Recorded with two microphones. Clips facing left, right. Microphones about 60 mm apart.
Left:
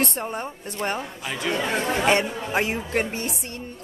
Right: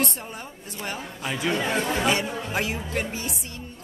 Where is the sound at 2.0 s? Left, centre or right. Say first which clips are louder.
Left 3 dB; left.